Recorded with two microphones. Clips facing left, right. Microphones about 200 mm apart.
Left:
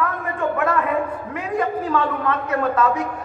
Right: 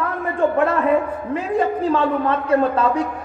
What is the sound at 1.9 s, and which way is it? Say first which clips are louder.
A man's voice: right 3 dB; 30° right (ahead or behind).